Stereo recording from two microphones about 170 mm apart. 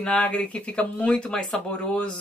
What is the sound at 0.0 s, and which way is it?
Speech, 5° left (ahead or behind).